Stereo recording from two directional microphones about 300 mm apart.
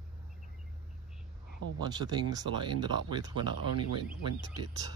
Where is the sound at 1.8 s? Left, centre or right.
Centre.